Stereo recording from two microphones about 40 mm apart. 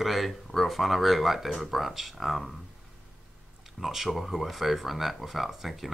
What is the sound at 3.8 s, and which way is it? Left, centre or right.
Speech, centre.